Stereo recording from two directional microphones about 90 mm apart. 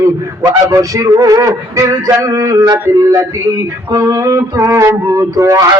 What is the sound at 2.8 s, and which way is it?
Speech, 20° right (ahead or behind).